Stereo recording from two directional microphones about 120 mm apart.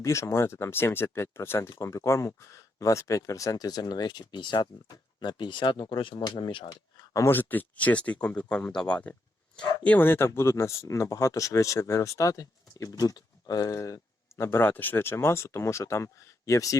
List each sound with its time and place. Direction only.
0.0 s speech: 25° left (ahead or behind); by 6.1 s 45° left (ahead or behind)
6.1 s speech: 35° left (ahead or behind)
7.3 s speech: 15° left (ahead or behind)